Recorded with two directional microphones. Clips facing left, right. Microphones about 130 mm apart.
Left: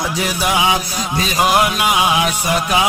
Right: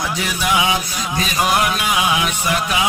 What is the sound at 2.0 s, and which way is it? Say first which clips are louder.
Music: left 3 dB; 25° left (ahead or behind).